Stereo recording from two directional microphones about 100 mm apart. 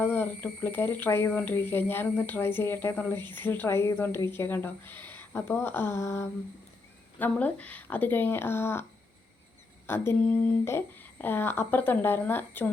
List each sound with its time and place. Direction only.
0.0 s speech: 20° left (ahead or behind)
3.2 s speech: 50° right (ahead or behind)
3.4 s speech: 20° left (ahead or behind)
7.2 s speech: 15° left (ahead or behind)
10.2 s a sound: 15° left (ahead or behind)
10.7 s speech: 25° left (ahead or behind)